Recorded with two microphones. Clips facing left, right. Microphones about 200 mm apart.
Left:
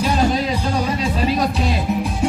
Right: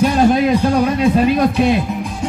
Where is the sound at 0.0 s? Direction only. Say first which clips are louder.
Right 6 dB; 55° right (ahead or behind).